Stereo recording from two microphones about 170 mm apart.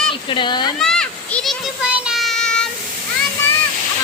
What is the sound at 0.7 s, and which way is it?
Children playing, 5° left (ahead or behind).